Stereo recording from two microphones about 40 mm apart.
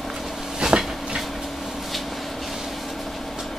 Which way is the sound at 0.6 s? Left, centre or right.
Centre.